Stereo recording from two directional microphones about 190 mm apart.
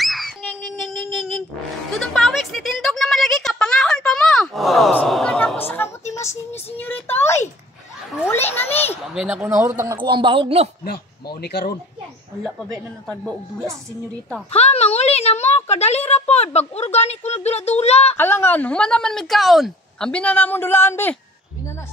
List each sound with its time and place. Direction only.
0.0 s a sound: centre (ahead or behind)
9.1 s speech: 5° right (ahead or behind)
9.9 s speech: 25° right (ahead or behind)
11.4 s speech: 55° left (ahead or behind)
13.1 s speech: 5° left (ahead or behind)
14.5 s a woman's voice: 35° left (ahead or behind)
18.1 s speech: 10° left (ahead or behind)